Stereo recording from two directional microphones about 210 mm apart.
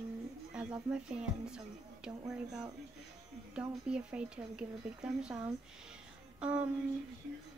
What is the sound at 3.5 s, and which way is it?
Speech, 5° right (ahead or behind).